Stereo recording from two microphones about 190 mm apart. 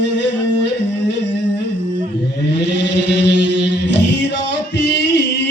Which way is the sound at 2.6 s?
65° left (ahead or behind).